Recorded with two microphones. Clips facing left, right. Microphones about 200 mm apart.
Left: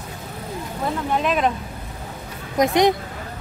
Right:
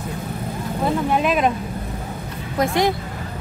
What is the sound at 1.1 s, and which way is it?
Speech, 10° right (ahead or behind).